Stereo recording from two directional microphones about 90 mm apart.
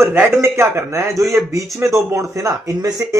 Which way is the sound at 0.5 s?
30° right (ahead or behind).